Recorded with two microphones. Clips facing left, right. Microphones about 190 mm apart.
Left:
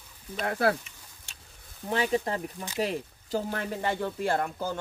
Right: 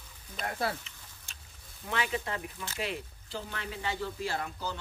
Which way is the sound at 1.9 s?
40° left (ahead or behind).